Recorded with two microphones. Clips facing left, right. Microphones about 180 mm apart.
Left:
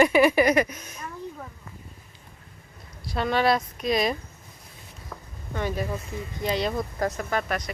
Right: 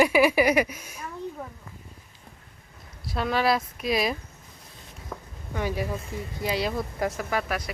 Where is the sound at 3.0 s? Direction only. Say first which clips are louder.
Left 2 dB; centre (ahead or behind).